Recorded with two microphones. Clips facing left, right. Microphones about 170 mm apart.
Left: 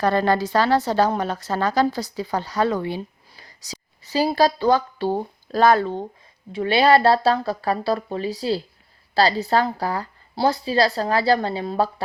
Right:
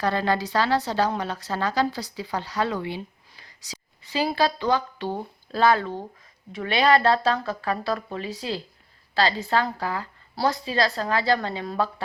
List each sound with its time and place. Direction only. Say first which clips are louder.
0.0 s a woman's voice: left 5 dB; 45° left (ahead or behind)
5.8 s speech: left 5 dB; 25° left (ahead or behind)